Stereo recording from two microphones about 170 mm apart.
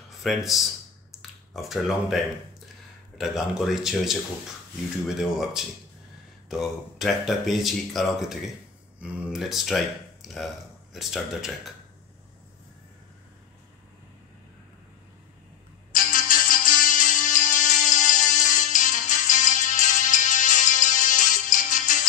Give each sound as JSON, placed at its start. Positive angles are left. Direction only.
{"t": 0.2, "sound": "speech", "side_deg": 0}
{"t": 15.9, "sound": "music", "side_deg": 55}